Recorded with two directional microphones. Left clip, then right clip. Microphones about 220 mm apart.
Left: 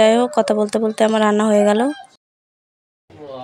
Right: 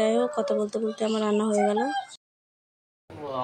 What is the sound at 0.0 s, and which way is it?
Speech, 40° left (ahead or behind).